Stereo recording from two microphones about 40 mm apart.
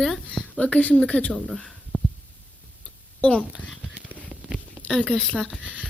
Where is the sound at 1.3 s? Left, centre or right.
Centre.